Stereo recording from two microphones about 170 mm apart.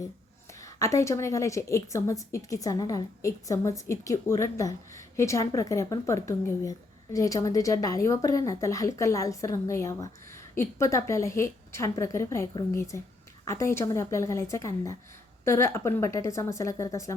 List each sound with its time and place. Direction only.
0.6 s a woman's voice: 20° left (ahead or behind)